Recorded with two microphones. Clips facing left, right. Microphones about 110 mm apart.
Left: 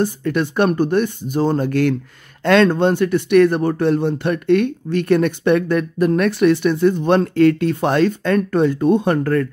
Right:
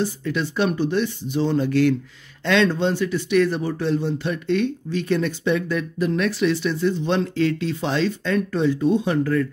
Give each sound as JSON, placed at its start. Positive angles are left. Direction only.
{"t": 0.0, "sound": "speech", "side_deg": 55}